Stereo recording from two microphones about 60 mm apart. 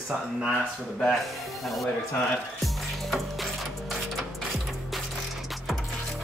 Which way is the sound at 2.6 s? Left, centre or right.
Centre.